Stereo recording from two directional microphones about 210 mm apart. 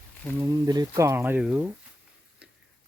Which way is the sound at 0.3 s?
15° right (ahead or behind).